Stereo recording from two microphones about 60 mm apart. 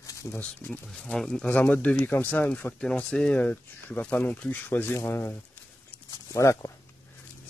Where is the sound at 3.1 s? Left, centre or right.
Centre.